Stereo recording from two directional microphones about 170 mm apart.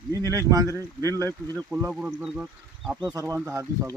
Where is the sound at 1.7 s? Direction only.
10° right (ahead or behind).